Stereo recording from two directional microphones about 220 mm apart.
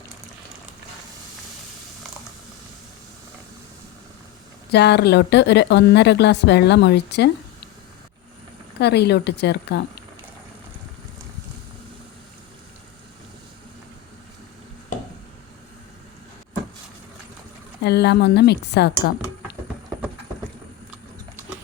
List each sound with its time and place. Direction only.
4.7 s speech: 50° left (ahead or behind)
8.8 s speech: 50° left (ahead or behind)
17.8 s speech: 50° left (ahead or behind)